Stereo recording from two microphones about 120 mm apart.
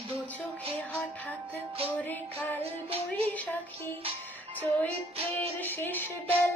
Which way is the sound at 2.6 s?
55° right (ahead or behind).